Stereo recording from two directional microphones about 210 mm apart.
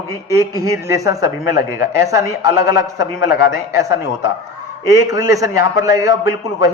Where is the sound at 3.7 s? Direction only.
15° right (ahead or behind).